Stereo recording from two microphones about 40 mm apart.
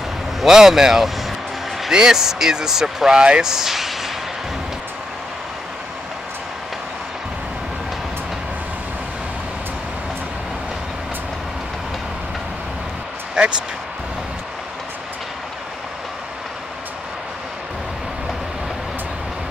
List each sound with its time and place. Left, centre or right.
0.4 s speech: centre
3.2 s speech: right; by 4.1 s centre
13.4 s basketball bounce: right